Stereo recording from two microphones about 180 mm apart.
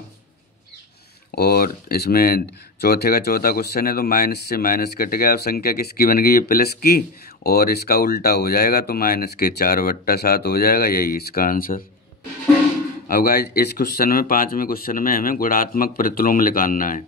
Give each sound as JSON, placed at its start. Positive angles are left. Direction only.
{"t": 1.3, "sound": "speech", "side_deg": 60}
{"t": 13.1, "sound": "speech", "side_deg": 55}